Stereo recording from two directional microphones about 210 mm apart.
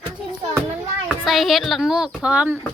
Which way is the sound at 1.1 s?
Centre (ahead or behind).